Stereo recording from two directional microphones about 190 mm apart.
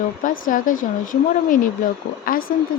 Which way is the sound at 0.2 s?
45° left (ahead or behind).